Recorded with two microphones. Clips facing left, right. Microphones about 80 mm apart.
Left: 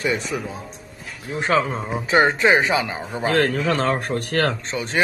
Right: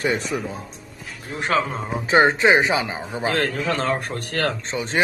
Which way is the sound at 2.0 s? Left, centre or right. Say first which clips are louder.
Right 1 dB; right.